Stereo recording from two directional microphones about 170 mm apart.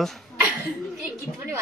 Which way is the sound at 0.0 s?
Centre (ahead or behind).